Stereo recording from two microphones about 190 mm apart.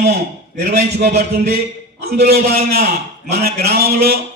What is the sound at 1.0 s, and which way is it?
Speech, 35° right (ahead or behind).